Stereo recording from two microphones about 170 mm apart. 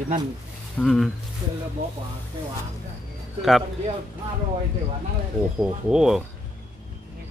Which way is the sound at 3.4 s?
Centre (ahead or behind).